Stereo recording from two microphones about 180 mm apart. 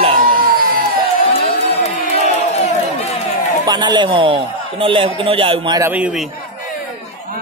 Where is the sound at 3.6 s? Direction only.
25° right (ahead or behind).